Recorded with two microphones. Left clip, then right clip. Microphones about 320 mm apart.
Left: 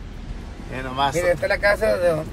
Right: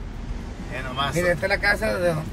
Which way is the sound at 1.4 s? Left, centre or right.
Left.